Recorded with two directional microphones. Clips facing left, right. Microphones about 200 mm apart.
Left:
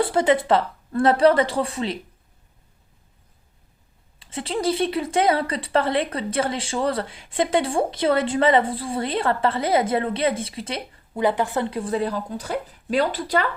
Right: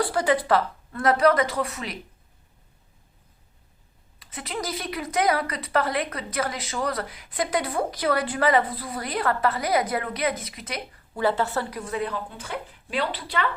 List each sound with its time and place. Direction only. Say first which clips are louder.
0.0 s speech: left 4 dB; 25° left (ahead or behind)
4.2 s speech: left 7 dB; 30° left (ahead or behind); by 13.5 s 45° left (ahead or behind)